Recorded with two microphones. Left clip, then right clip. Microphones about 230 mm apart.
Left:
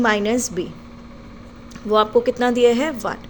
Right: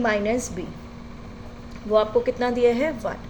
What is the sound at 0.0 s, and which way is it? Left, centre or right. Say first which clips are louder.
Speech: left 4 dB; left.